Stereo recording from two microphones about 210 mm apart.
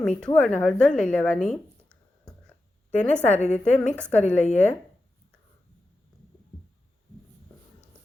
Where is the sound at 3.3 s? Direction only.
30° left (ahead or behind).